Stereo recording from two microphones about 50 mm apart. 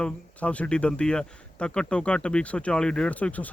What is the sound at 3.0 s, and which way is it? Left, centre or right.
Speech, left.